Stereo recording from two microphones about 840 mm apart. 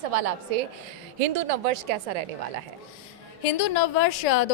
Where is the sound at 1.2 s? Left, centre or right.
Right.